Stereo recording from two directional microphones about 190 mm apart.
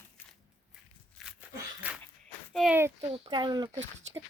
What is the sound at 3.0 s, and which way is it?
Speech, 30° right (ahead or behind).